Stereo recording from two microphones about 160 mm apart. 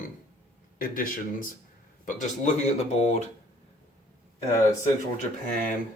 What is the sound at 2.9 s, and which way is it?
Speech, 40° left (ahead or behind).